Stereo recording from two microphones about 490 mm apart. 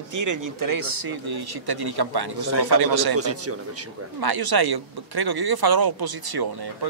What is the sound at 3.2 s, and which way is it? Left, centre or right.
Speech, right.